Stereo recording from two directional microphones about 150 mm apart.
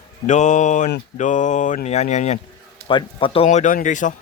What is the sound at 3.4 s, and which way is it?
Speech, 55° left (ahead or behind).